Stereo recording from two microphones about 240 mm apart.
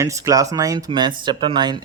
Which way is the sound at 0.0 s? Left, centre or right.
Centre.